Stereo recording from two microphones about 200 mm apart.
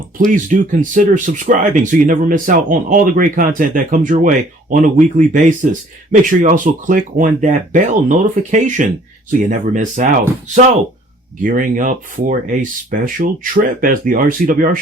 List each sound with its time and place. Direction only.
0.3 s speech: 40° right (ahead or behind)
11.4 s speech: 40° right (ahead or behind)